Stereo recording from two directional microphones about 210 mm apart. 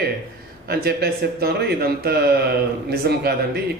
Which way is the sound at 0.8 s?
50° right (ahead or behind).